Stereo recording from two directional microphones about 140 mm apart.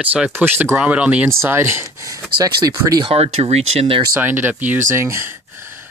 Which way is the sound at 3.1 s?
50° right (ahead or behind).